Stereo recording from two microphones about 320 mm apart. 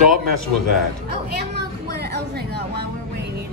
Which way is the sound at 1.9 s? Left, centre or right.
Right.